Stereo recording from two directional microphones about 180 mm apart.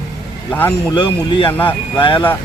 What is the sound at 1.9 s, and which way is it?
Speech, 30° left (ahead or behind).